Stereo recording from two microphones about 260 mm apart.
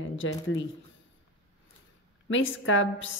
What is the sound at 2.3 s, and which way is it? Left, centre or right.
Speech, left.